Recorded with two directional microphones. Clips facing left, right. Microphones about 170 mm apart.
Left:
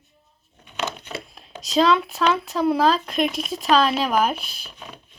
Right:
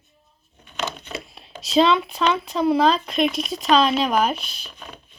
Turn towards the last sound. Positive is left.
turn(degrees=5)  # may be behind; listen again after turning